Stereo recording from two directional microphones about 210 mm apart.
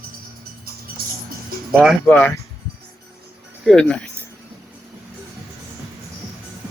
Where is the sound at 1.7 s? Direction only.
Centre (ahead or behind).